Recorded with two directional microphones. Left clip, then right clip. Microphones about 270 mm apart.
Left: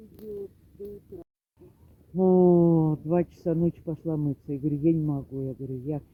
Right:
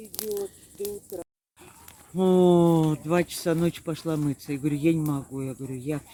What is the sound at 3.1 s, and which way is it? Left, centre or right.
Speech, centre.